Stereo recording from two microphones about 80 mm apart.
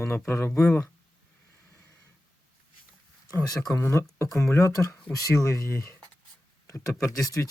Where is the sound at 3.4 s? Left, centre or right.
Left.